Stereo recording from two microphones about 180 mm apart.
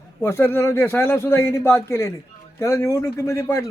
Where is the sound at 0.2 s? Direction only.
15° left (ahead or behind).